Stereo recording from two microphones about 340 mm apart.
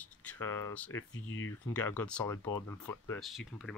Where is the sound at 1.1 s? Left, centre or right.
Left.